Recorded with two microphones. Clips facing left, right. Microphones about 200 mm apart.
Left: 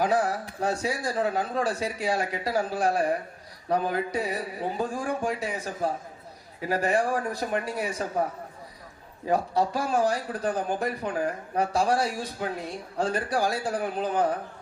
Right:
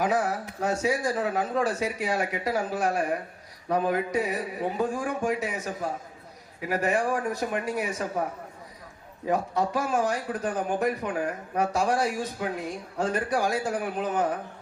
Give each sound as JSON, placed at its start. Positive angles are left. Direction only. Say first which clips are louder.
{"t": 0.0, "sound": "speech", "louder": "left 1 dB", "side_deg": 35}
{"t": 9.2, "sound": "speech", "louder": "left 1 dB", "side_deg": 35}